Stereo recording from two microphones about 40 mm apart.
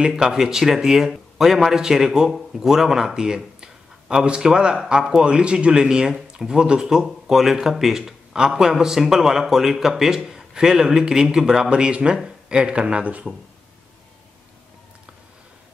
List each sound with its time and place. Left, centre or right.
0.0 s a man's voice: centre
11.7 s speech: right
13.3 s speech: centre